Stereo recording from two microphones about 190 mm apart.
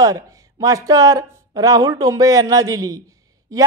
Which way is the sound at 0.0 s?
20° right (ahead or behind).